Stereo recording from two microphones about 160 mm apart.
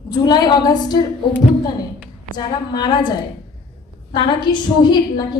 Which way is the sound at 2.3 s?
25° left (ahead or behind).